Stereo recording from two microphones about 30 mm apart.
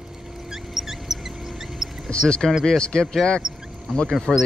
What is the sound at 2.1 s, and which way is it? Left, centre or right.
Basketball bounce, left.